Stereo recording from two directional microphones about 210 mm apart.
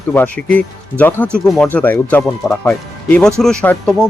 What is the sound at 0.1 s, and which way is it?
Speech, 5° left (ahead or behind).